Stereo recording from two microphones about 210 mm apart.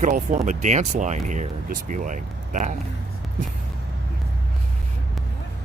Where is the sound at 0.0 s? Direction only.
35° right (ahead or behind).